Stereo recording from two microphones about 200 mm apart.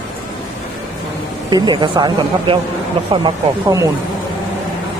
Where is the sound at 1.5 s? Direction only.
20° right (ahead or behind).